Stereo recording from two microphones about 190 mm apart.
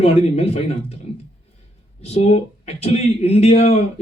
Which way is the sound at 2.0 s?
35° left (ahead or behind).